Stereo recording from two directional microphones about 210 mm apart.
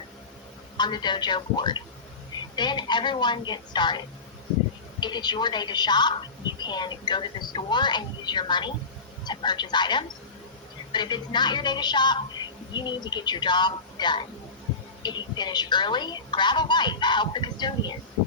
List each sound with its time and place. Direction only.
0.8 s a woman's voice: 20° left (ahead or behind)